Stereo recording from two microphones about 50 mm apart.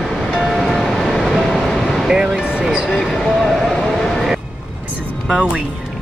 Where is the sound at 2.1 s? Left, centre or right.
Centre.